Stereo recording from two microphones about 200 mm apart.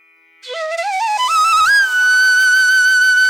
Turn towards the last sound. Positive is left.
turn(degrees=0)  # may be behind; listen again after turning